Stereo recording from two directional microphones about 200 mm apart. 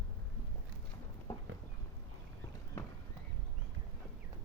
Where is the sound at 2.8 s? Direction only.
10° left (ahead or behind).